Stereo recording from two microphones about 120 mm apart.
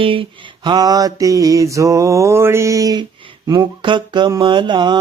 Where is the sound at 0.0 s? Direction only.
50° right (ahead or behind).